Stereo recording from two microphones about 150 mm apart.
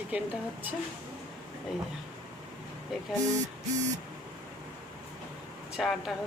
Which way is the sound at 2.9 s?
Centre (ahead or behind).